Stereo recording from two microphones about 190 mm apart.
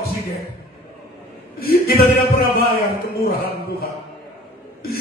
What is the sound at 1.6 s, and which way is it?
Speech, 55° left (ahead or behind).